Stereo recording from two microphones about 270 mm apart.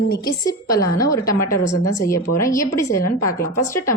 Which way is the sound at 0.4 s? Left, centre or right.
Centre.